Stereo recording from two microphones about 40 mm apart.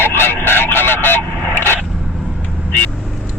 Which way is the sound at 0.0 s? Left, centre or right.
Left.